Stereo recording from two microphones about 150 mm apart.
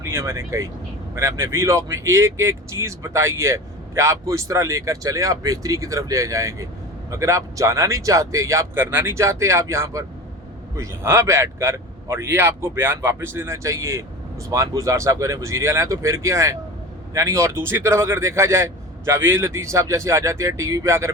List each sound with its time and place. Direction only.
0.0 s a man's voice: 15° right (ahead or behind)